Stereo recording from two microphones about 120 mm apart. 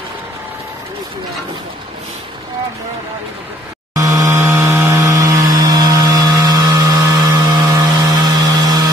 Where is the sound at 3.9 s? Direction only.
25° right (ahead or behind).